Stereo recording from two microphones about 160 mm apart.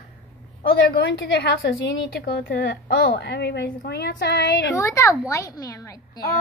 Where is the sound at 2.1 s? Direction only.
70° left (ahead or behind).